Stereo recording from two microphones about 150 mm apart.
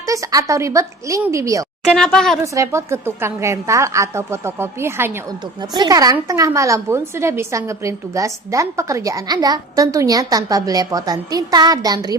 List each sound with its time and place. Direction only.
0.1 s a woman's voice: 20° right (ahead or behind)
1.9 s speech: 5° left (ahead or behind)
2.4 s a woman's voice: 20° right (ahead or behind)
5.7 s a woman's voice: 25° right (ahead or behind)